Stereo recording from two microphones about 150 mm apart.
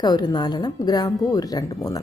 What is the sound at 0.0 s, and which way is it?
Speech, 30° left (ahead or behind).